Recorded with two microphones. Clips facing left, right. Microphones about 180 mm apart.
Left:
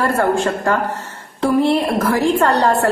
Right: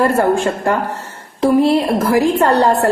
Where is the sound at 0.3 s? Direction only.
20° right (ahead or behind).